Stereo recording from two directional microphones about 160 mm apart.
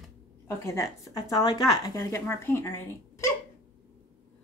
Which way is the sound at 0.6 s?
20° left (ahead or behind).